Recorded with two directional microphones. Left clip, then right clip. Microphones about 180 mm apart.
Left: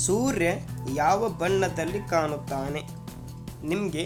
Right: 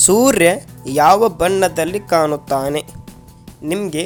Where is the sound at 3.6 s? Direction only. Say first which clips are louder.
Right 8 dB; 35° right (ahead or behind).